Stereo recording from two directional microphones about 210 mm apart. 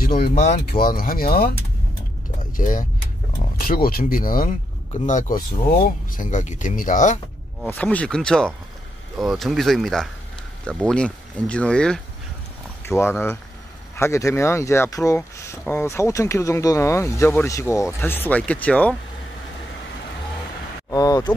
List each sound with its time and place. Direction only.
0.0 s speech: 45° left (ahead or behind)
2.5 s speech: 40° left (ahead or behind)
7.6 s speech: 5° left (ahead or behind)
20.9 s a sound: 15° left (ahead or behind)